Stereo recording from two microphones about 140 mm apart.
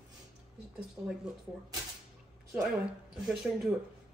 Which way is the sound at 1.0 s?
20° right (ahead or behind).